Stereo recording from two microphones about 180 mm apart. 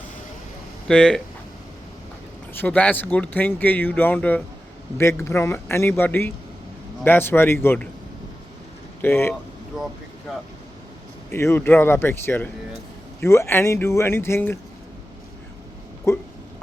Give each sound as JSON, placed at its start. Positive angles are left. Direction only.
{"t": 0.9, "sound": "speech", "side_deg": 5}
{"t": 2.5, "sound": "speech", "side_deg": 10}
{"t": 9.0, "sound": "speech", "side_deg": 10}
{"t": 11.3, "sound": "speech", "side_deg": 15}
{"t": 16.1, "sound": "speech", "side_deg": 15}